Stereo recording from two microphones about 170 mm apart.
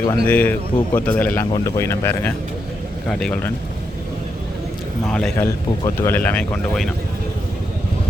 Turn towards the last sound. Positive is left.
turn(degrees=5)  # may be behind; listen again after turning